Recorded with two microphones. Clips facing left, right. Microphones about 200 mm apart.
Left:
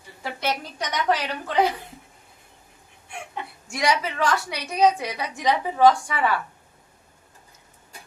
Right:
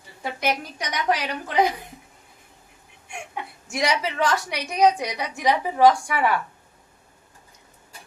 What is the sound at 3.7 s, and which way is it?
A woman's voice, 25° right (ahead or behind).